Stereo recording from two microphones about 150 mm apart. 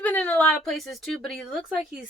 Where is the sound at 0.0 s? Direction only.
10° left (ahead or behind).